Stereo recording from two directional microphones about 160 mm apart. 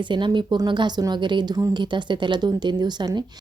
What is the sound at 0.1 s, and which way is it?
A woman's voice, 30° right (ahead or behind).